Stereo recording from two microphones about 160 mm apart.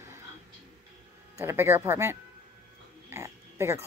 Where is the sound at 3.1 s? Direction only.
15° right (ahead or behind).